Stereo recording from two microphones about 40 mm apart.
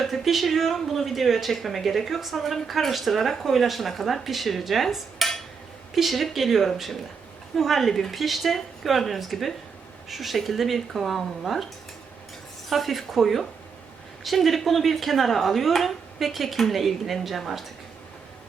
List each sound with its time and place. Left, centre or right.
0.0 s a woman's voice: centre
12.7 s a woman's voice: centre